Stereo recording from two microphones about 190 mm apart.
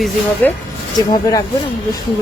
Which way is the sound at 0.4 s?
10° left (ahead or behind).